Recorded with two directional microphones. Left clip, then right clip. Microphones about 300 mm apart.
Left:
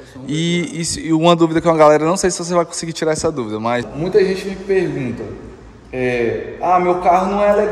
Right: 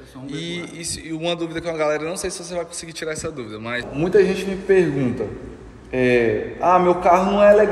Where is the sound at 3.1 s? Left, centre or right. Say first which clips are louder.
Left 11 dB; left.